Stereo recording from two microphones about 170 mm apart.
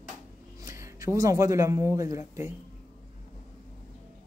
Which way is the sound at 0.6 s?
15° right (ahead or behind).